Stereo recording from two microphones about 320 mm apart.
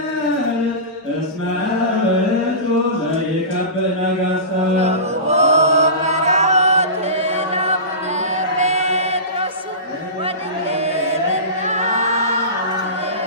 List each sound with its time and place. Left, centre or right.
4.8 s chant: centre
10.7 s mantra: centre
11.6 s choir: right